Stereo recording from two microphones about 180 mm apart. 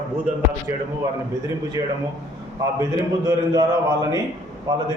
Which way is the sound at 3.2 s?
20° right (ahead or behind).